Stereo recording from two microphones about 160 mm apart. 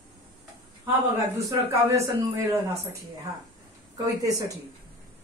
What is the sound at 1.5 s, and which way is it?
Speech, 20° right (ahead or behind).